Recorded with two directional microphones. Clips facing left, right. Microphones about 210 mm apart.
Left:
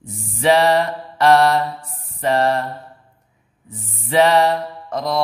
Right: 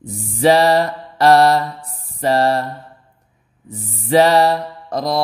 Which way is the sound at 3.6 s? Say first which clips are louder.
Right 6 dB; 35° right (ahead or behind).